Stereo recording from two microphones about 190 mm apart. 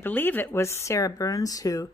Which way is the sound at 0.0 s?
10° left (ahead or behind).